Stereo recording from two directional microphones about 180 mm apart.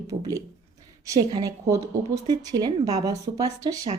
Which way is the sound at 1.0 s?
20° right (ahead or behind).